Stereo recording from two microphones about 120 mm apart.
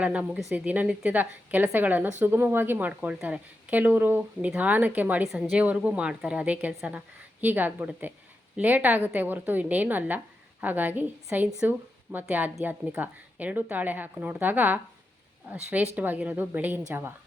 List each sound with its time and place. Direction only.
0.0 s a woman's voice: 10° right (ahead or behind)
5.3 s a woman's voice: centre (ahead or behind)
5.5 s a woman's voice: 10° right (ahead or behind)
16.0 s a woman's voice: 15° right (ahead or behind)